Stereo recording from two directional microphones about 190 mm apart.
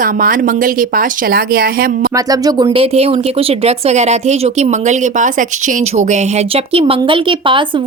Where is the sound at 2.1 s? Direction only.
20° right (ahead or behind).